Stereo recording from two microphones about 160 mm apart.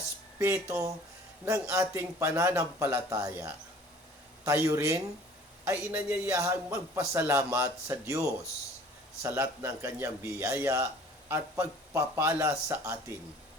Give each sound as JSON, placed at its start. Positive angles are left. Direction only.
{"t": 0.3, "sound": "speech", "side_deg": -15}
{"t": 9.2, "sound": "speech", "side_deg": -15}